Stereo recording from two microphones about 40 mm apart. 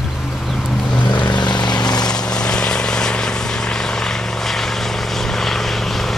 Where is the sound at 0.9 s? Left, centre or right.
Left.